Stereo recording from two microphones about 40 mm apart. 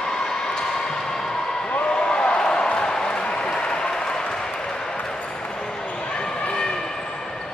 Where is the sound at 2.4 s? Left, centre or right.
Left.